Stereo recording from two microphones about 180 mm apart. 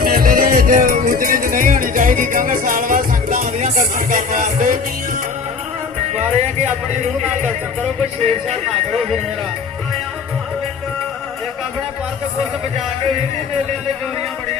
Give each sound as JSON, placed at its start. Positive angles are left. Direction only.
{"t": 0.0, "sound": "music", "side_deg": -55}
{"t": 6.1, "sound": "speech", "side_deg": -40}